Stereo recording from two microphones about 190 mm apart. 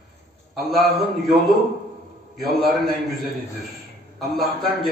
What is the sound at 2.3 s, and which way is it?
Speech, centre (ahead or behind).